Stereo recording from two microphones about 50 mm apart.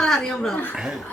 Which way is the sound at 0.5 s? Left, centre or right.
Left.